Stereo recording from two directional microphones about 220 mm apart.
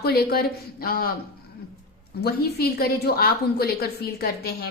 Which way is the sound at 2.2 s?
45° left (ahead or behind).